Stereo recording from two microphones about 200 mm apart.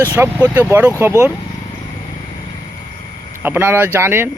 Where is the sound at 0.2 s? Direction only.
10° right (ahead or behind).